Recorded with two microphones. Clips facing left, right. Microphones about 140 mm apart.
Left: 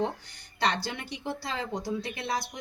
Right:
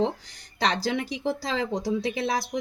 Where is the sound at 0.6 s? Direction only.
90° right.